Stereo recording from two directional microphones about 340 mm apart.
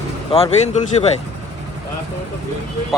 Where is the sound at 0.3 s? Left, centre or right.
Centre.